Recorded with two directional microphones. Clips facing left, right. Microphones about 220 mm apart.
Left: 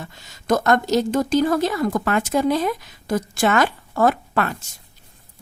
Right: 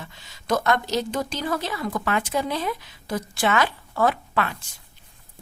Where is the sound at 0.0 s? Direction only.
45° left (ahead or behind).